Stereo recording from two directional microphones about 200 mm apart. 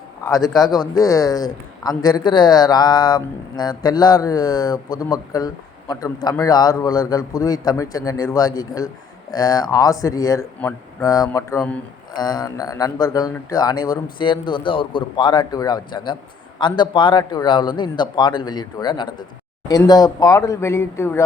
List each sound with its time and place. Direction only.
0.3 s a man's voice: 15° left (ahead or behind)